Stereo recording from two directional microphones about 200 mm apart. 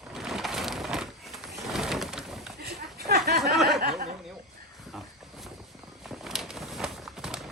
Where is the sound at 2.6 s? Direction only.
50° right (ahead or behind).